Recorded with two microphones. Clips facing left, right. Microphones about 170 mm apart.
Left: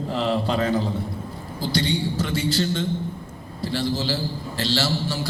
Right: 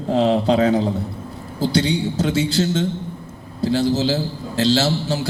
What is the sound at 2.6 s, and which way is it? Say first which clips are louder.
Speech: right 4 dB; 50° right (ahead or behind).